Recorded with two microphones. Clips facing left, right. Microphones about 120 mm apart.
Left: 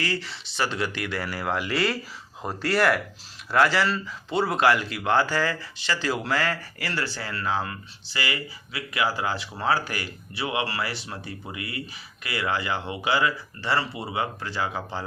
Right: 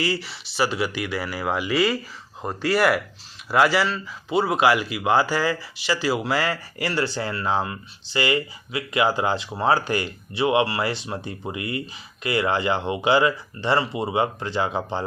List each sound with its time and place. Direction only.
0.0 s speech: 10° right (ahead or behind)